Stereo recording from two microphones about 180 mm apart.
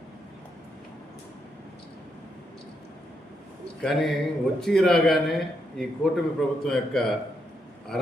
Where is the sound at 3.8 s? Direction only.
Centre (ahead or behind).